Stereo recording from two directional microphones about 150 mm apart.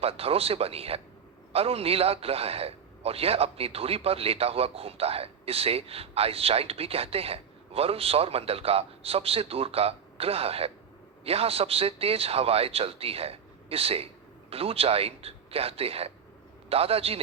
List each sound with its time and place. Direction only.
0.0 s a man's voice: 40° right (ahead or behind)